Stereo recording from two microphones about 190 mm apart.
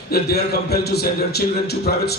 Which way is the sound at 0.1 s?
55° left (ahead or behind).